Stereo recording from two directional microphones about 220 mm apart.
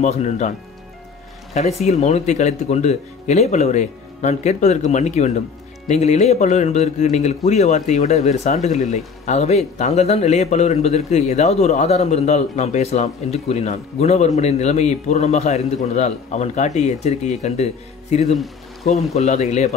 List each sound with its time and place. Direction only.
0.0 s speech: 30° left (ahead or behind)
1.5 s speech: 30° left (ahead or behind)